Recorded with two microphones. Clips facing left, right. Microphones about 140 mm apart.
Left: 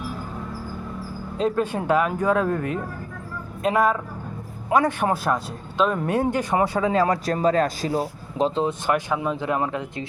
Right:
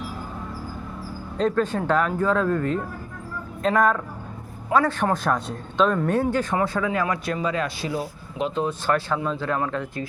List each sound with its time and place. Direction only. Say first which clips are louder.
1.4 s a man's voice: right 1 dB; 10° left (ahead or behind)
3.6 s a man's voice: even; 10° left (ahead or behind)
6.9 s speech: left 4 dB; 35° left (ahead or behind)
8.6 s a man's voice: left 1 dB; 15° left (ahead or behind)